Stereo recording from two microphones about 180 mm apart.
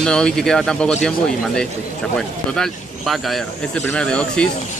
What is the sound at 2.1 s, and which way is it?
Speech, 5° left (ahead or behind).